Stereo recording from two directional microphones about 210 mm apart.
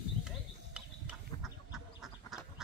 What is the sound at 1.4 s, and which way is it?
Duck, centre (ahead or behind).